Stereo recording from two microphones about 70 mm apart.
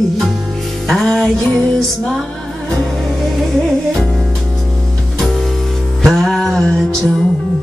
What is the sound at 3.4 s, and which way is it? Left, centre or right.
Music, centre.